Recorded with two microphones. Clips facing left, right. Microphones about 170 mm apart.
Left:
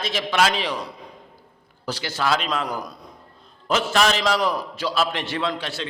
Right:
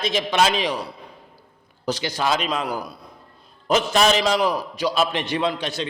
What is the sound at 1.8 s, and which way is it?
Speech, 20° right (ahead or behind).